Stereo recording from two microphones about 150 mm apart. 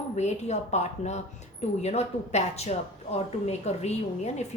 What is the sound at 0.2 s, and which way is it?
A woman's voice, 50° left (ahead or behind).